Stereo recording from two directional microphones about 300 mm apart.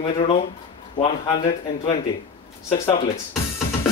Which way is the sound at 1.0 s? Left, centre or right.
Centre.